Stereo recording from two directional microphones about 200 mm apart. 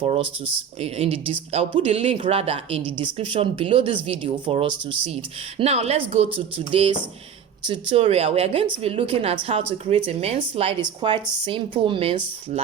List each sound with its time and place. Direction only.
0.0 s speech: 30° right (ahead or behind)